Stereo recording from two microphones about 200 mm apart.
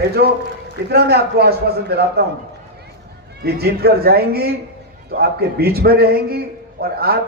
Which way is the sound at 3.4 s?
50° right (ahead or behind).